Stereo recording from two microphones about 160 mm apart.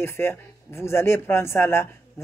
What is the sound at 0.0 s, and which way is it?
Speech, 15° left (ahead or behind).